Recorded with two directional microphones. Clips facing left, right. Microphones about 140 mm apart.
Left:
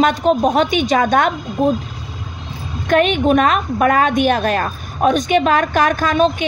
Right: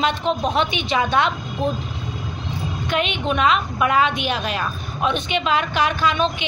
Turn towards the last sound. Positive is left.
turn(degrees=45)  # may be behind; listen again after turning